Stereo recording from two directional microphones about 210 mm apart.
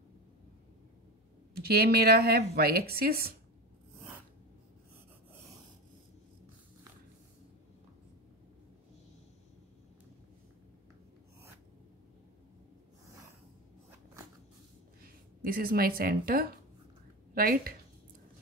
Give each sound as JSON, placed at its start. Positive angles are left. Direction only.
{"t": 1.5, "sound": "speech", "side_deg": -50}
{"t": 15.4, "sound": "speech", "side_deg": -45}